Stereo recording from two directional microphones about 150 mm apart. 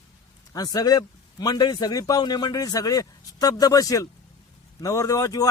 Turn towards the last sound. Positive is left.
turn(degrees=25)  # may be behind; listen again after turning